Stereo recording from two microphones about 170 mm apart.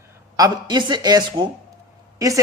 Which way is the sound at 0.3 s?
25° right (ahead or behind).